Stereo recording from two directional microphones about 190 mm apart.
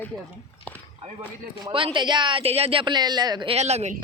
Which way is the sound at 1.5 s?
25° right (ahead or behind).